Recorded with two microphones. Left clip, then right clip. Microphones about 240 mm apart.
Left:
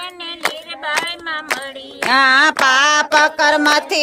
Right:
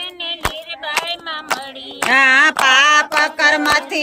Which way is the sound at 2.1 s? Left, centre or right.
Left.